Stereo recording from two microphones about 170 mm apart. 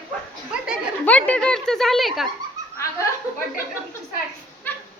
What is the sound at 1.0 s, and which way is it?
A woman's voice, 10° left (ahead or behind).